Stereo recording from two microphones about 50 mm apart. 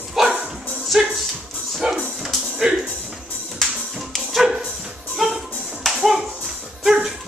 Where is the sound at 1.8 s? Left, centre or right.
Right.